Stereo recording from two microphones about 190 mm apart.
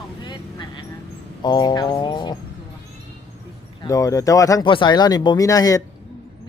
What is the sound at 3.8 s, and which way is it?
Speech, 20° left (ahead or behind).